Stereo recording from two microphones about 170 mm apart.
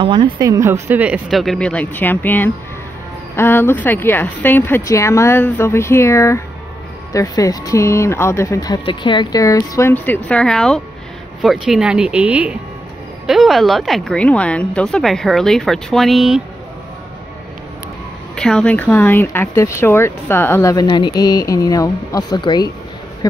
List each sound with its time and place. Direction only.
0.0 s a woman's voice: 30° right (ahead or behind); by 16.4 s centre (ahead or behind)
18.3 s speech: 5° left (ahead or behind); by 22.7 s 25° left (ahead or behind)